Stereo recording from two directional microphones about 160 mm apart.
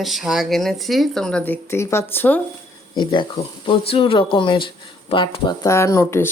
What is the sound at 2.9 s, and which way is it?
Speech, 30° left (ahead or behind).